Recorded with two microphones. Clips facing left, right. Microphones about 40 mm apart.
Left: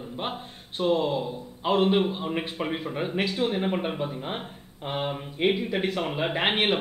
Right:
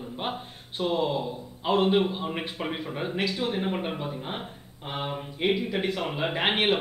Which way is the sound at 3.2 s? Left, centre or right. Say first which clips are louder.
Left 2 dB; left.